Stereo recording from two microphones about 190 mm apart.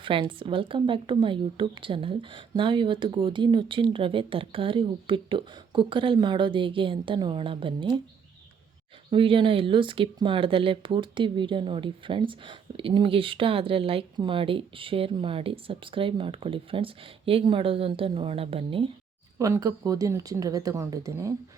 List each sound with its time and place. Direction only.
0.0 s speech: 25° right (ahead or behind)
9.0 s speech: 25° right (ahead or behind)
19.4 s speech: 20° right (ahead or behind)